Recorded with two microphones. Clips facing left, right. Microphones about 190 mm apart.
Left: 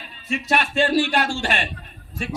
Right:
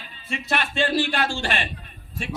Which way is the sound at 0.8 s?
45° left (ahead or behind).